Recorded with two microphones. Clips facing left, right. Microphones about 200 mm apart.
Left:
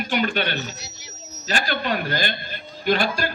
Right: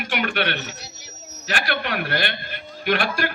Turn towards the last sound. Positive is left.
turn(degrees=-65)  # may be behind; listen again after turning